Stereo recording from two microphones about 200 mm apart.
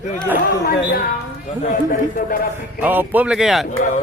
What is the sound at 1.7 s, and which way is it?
Speech, 40° left (ahead or behind).